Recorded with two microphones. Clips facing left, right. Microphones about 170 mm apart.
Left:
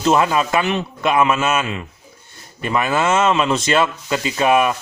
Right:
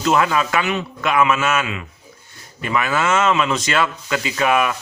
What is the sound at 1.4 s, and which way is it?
Speech, 15° left (ahead or behind).